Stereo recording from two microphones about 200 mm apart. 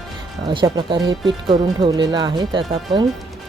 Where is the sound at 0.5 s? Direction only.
25° right (ahead or behind).